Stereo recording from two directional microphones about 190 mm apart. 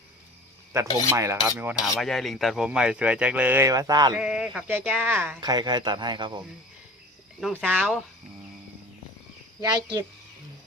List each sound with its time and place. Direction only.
1.1 s speech: 15° right (ahead or behind)
2.0 s speech: centre (ahead or behind); by 4.1 s 20° right (ahead or behind)
4.1 s speech: 5° right (ahead or behind); by 6.3 s 25° right (ahead or behind)
7.4 s speech: 5° right (ahead or behind)
9.6 s speech: 20° right (ahead or behind)